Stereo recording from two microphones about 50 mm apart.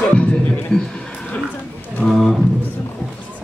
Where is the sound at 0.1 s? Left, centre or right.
Left.